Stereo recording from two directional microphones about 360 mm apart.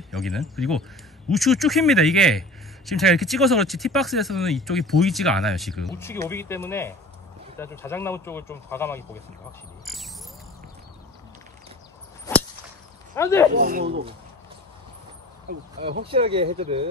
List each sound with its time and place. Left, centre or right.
0.1 s speech: centre
9.9 s a sound: centre
12.3 s whip: centre
13.1 s speech: centre
13.5 s speech: right
16.1 s speech: centre